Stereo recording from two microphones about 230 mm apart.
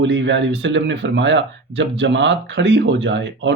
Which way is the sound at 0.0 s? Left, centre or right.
Right.